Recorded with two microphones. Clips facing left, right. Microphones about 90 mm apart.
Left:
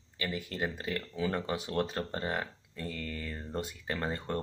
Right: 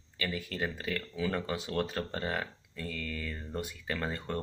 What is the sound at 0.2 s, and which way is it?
Speech, 20° left (ahead or behind).